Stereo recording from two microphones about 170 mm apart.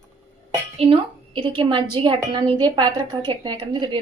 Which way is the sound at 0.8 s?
30° right (ahead or behind).